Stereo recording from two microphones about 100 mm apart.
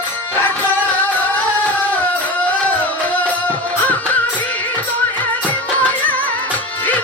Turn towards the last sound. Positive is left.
turn(degrees=15)  # may be behind; listen again after turning